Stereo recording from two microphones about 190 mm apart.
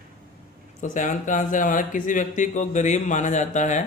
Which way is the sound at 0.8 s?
40° left (ahead or behind).